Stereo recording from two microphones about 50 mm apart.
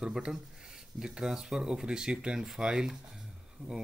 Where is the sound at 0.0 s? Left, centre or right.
Centre.